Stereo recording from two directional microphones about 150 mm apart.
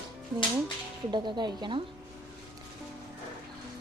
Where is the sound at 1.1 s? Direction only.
30° right (ahead or behind).